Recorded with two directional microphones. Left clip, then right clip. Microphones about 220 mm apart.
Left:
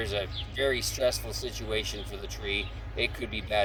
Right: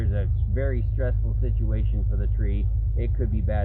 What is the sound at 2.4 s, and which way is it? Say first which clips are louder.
Speech: left 6 dB; 15° left (ahead or behind).